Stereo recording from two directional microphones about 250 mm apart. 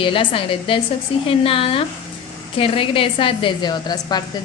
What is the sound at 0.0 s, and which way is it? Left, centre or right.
A woman's voice, left.